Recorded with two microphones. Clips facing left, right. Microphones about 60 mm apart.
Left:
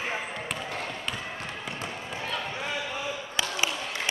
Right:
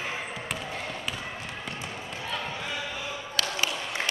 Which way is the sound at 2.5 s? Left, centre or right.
Centre.